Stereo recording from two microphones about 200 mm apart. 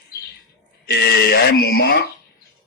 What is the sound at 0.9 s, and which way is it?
Speech, 55° left (ahead or behind).